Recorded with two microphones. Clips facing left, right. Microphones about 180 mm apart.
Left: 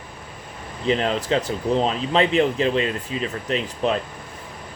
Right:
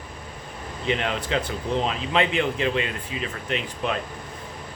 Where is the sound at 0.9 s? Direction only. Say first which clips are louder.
Left 5 dB; 35° left (ahead or behind).